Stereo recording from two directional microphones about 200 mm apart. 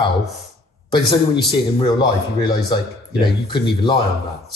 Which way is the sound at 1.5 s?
20° left (ahead or behind).